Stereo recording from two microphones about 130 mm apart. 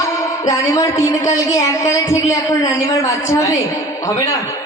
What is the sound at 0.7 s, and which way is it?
Speech, 25° left (ahead or behind).